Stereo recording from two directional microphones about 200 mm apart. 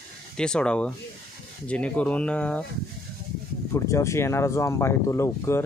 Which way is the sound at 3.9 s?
15° left (ahead or behind).